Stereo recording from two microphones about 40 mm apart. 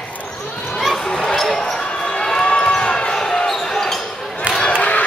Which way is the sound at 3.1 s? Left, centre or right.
Centre.